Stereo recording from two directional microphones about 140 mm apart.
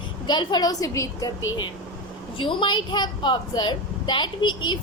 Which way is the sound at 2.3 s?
35° left (ahead or behind).